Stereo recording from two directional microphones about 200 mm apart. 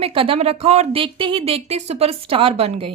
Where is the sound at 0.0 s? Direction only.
25° right (ahead or behind).